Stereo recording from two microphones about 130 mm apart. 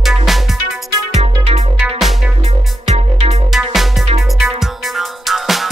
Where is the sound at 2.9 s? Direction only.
55° right (ahead or behind).